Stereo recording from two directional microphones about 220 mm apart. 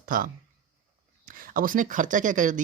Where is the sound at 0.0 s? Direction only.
40° right (ahead or behind).